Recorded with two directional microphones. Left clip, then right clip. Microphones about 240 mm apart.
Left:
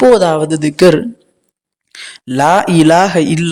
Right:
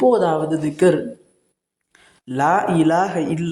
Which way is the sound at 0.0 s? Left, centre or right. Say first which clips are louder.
Left 8 dB; left.